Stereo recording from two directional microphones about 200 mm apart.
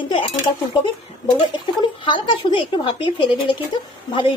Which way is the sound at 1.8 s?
25° left (ahead or behind).